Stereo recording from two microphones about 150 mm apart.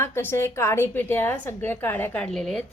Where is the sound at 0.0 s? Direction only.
15° left (ahead or behind).